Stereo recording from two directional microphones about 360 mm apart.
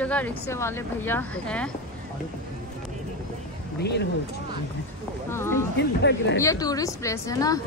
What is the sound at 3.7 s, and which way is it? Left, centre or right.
Speech, left.